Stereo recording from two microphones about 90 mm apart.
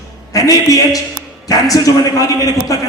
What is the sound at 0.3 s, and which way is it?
A man's voice, 40° left (ahead or behind).